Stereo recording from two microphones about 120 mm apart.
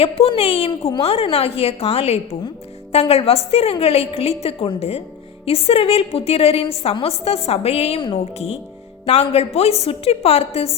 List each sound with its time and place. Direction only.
0.0 s a woman's voice: 55° left (ahead or behind)